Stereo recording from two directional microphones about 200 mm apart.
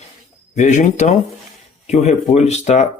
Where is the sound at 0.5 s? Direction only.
35° left (ahead or behind).